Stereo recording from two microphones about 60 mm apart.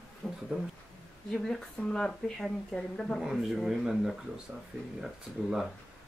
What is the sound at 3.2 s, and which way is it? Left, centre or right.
Speech, centre.